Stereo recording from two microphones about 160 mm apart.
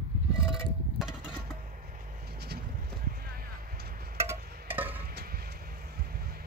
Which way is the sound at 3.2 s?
70° right (ahead or behind).